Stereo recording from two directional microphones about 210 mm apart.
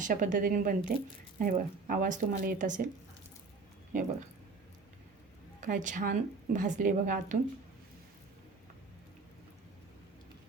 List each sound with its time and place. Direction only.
0.0 s a woman's voice: 40° right (ahead or behind)
5.5 s a woman's voice: 40° right (ahead or behind)